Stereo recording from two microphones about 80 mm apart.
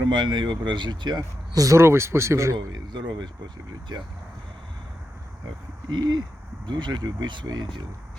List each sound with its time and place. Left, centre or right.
0.0 s speech: right
1.5 s speech: right
2.7 s speech: right
5.9 s speech: right
6.7 s speech: right